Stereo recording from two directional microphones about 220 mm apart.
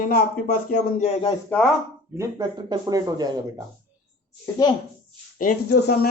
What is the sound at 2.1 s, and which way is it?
Speech, 15° right (ahead or behind).